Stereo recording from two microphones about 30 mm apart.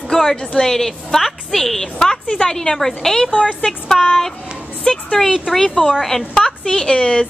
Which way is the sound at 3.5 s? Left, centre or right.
Left.